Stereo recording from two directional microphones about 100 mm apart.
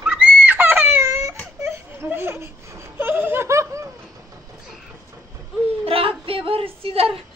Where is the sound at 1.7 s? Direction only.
20° right (ahead or behind).